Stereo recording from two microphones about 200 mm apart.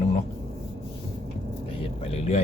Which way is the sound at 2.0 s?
30° left (ahead or behind).